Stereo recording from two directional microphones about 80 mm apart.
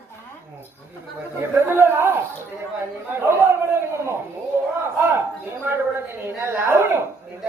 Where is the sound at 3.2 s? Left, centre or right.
Right.